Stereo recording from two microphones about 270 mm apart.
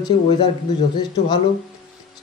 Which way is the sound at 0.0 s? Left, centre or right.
Centre.